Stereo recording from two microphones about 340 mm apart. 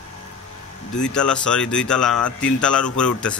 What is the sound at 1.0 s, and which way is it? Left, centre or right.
Speech, centre.